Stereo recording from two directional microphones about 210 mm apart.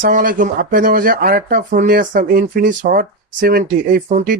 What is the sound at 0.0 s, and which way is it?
Speech, 40° right (ahead or behind).